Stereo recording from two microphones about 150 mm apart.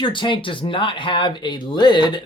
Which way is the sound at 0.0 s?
35° left (ahead or behind).